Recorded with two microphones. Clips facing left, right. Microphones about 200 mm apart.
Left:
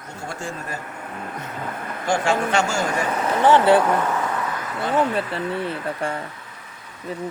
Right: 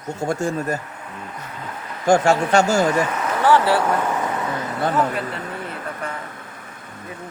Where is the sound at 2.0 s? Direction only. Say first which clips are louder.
Right 5 dB; 45° right (ahead or behind).